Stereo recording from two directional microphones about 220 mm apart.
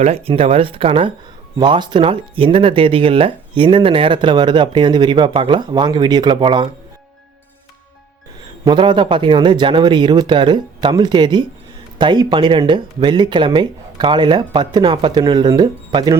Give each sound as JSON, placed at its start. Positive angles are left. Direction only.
{"t": 0.0, "sound": "speech", "side_deg": -25}
{"t": 8.6, "sound": "speech", "side_deg": -20}